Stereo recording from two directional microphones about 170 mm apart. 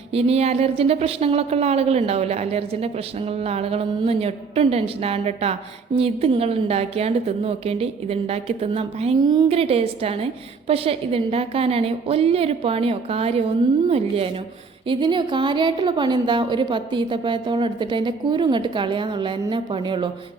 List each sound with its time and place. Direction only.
0.1 s a woman's voice: 35° right (ahead or behind)